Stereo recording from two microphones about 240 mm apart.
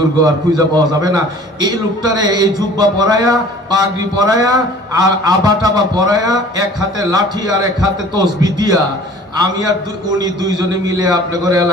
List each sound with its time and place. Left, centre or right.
0.2 s a man's voice: centre